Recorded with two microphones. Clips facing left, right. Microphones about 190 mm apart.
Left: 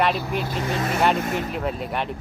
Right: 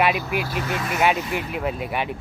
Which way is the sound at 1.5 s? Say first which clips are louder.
Right 1 dB; 5° right (ahead or behind).